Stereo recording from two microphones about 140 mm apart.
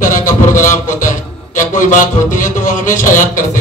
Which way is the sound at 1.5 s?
65° left (ahead or behind).